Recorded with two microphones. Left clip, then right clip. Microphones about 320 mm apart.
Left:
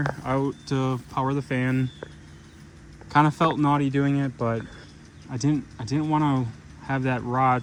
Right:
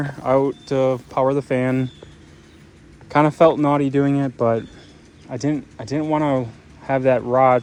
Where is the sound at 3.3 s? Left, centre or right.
Centre.